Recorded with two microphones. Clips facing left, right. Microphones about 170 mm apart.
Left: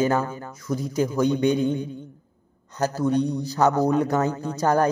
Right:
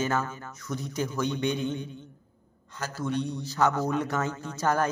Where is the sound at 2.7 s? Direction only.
40° left (ahead or behind).